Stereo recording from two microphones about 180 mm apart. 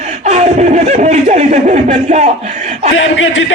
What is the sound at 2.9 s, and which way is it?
Speech, 90° left.